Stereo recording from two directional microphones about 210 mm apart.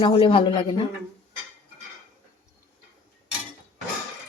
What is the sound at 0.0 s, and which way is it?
Speech, 25° left (ahead or behind).